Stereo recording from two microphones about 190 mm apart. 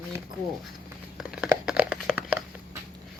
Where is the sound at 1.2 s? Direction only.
5° right (ahead or behind).